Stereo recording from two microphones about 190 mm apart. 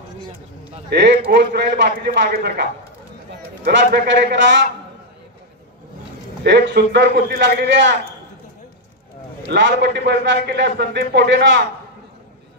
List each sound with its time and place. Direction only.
0.8 s a man's voice: 60° right (ahead or behind)
6.4 s a man's voice: 60° right (ahead or behind)
9.5 s a man's voice: 70° right (ahead or behind)